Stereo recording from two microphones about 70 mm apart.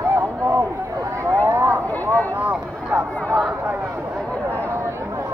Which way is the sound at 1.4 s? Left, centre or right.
Right.